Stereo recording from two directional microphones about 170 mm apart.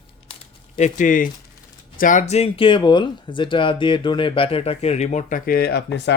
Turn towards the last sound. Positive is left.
turn(degrees=90)